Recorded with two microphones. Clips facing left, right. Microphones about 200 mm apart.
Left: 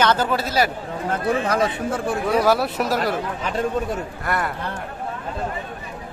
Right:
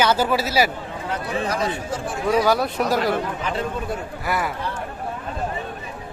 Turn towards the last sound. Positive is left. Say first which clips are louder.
# even
turn(degrees=0)  # may be behind; listen again after turning